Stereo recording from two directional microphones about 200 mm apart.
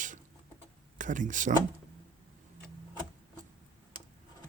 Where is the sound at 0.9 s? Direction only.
40° right (ahead or behind).